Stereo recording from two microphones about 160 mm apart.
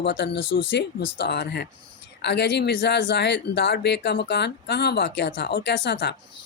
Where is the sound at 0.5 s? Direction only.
85° left.